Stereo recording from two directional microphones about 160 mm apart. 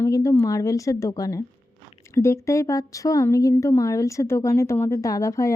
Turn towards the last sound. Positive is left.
turn(degrees=20)  # may be behind; listen again after turning